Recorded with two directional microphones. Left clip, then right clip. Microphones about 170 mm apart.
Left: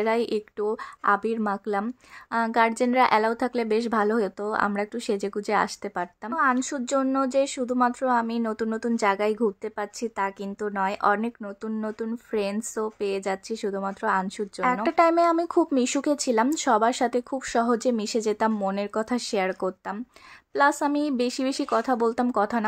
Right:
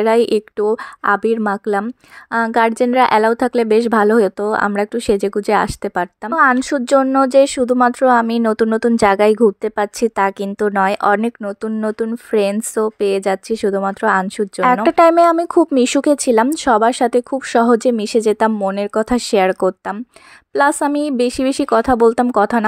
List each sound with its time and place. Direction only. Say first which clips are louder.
0.0 s a woman's voice: right 11 dB; 40° right (ahead or behind)
6.3 s a woman's voice: right 11 dB; 50° right (ahead or behind)